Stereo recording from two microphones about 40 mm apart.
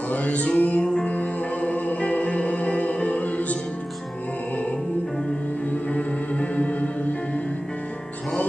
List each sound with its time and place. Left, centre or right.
0.1 s music: left
5.7 s music: left